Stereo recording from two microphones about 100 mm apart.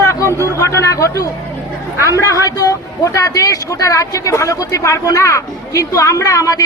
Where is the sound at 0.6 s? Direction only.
30° left (ahead or behind).